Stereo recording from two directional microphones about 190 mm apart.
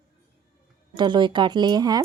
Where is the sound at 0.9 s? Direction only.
25° right (ahead or behind).